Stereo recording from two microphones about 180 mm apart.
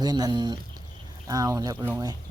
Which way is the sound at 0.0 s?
20° right (ahead or behind).